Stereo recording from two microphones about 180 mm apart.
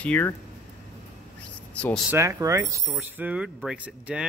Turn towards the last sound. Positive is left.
turn(degrees=-10)  # may be behind; listen again after turning